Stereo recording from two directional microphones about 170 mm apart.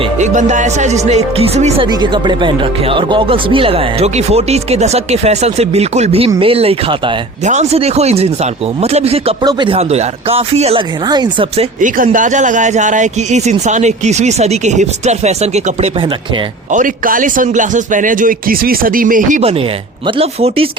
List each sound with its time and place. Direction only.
0.2 s speech: 45° right (ahead or behind)
1.9 s speech: 25° right (ahead or behind)
9.4 s speech: 25° right (ahead or behind)
11.5 s speech: 45° right (ahead or behind)
16.7 s speech: 55° right (ahead or behind)
19.4 s speech: 35° right (ahead or behind)